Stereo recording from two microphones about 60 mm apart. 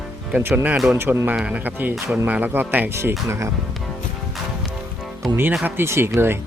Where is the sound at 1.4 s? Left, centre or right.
Right.